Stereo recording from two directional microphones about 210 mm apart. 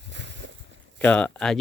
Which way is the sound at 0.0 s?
55° right (ahead or behind).